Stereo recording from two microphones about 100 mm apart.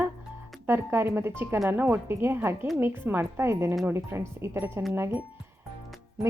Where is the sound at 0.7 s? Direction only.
20° right (ahead or behind).